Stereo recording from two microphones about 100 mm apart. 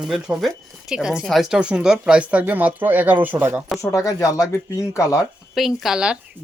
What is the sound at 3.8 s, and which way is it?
Speech, 35° left (ahead or behind).